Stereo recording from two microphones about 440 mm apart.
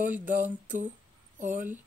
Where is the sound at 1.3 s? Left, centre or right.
Centre.